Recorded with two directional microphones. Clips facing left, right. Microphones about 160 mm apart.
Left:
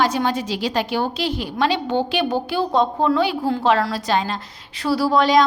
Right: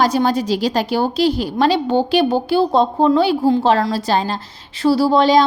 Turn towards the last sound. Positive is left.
turn(degrees=-30)  # may be behind; listen again after turning